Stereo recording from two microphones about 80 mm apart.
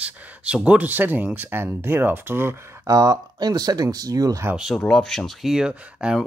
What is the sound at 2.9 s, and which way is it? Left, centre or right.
Speech, right.